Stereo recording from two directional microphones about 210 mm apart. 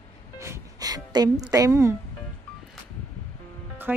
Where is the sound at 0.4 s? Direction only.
15° right (ahead or behind).